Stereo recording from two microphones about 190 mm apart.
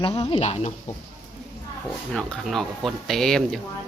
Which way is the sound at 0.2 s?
30° left (ahead or behind).